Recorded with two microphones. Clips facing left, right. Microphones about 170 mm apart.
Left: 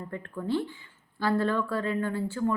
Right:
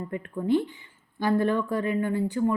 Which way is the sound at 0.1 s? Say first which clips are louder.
Right 5 dB; 15° right (ahead or behind).